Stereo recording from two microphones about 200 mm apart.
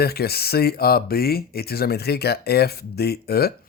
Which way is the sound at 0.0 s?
50° left (ahead or behind).